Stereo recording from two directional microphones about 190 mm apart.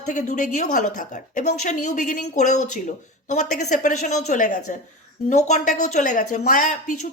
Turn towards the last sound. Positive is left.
turn(degrees=45)  # may be behind; listen again after turning